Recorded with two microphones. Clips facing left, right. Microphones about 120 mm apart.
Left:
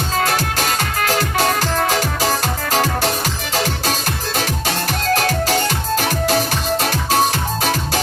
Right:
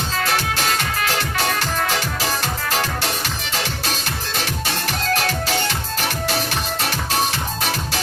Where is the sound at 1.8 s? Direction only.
45° left (ahead or behind).